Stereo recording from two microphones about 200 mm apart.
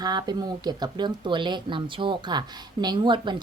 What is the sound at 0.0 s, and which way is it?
Speech, 20° right (ahead or behind).